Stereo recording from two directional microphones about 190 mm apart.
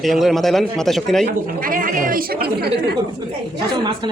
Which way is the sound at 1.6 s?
45° right (ahead or behind).